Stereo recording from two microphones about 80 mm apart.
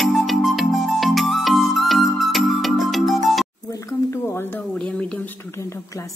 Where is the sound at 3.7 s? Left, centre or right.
Left.